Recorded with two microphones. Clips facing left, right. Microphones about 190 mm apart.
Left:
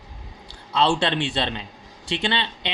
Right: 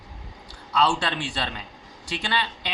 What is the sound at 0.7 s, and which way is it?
Speech, 25° left (ahead or behind).